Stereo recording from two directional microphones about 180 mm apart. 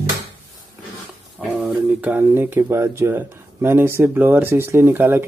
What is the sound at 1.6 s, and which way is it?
Speech, 10° right (ahead or behind).